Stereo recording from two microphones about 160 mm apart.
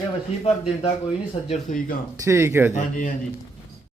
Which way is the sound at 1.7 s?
50° left (ahead or behind).